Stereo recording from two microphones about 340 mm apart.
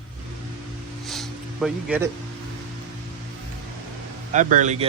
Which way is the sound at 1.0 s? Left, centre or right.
Centre.